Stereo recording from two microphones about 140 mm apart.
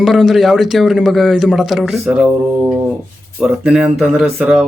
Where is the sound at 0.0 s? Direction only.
Centre (ahead or behind).